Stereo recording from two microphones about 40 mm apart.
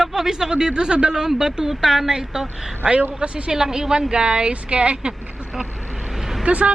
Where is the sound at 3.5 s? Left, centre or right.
Centre.